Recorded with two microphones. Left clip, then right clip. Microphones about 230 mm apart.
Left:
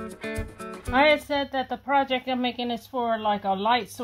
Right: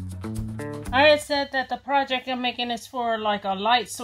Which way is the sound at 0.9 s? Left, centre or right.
Left.